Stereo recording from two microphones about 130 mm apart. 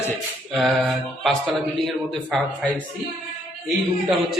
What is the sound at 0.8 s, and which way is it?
Speech, 5° left (ahead or behind).